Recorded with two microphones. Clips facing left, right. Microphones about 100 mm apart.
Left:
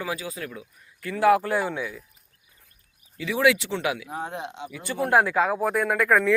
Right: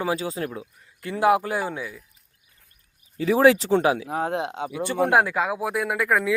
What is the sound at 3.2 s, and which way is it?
Speech, 35° right (ahead or behind).